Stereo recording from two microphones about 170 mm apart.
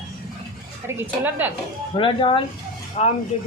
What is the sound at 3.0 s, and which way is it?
Speech, 45° left (ahead or behind).